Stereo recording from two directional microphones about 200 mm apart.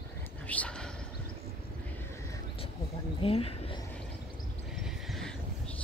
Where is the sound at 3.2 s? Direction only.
30° left (ahead or behind).